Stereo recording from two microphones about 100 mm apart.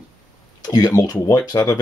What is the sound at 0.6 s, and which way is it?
Speech, 40° left (ahead or behind).